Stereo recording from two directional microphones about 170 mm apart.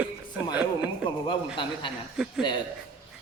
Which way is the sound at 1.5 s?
30° left (ahead or behind).